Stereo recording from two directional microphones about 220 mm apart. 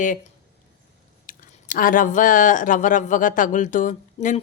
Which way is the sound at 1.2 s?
40° left (ahead or behind).